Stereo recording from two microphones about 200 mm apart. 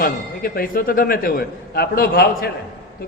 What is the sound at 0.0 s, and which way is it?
A man's voice, 45° left (ahead or behind).